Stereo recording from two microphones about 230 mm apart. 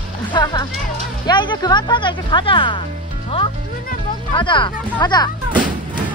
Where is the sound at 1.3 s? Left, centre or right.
Centre.